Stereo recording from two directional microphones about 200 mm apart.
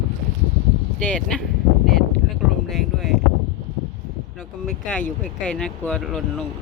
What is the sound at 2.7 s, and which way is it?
Speech, centre (ahead or behind).